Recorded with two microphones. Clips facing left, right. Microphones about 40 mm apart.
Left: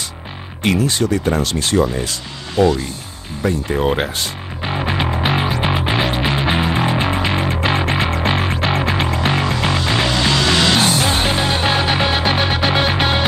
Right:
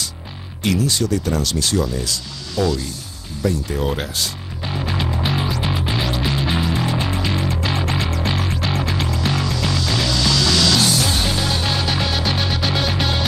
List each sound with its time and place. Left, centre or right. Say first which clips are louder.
0.7 s speech: left 3 dB; left
3.4 s music: left 4 dB; left